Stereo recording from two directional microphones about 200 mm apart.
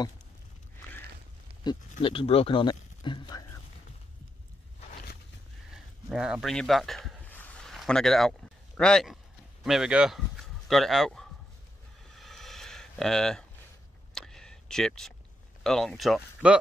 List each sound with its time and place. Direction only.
1.6 s speech: 20° left (ahead or behind)
6.0 s a sound: 5° right (ahead or behind)
15.6 s speech: centre (ahead or behind)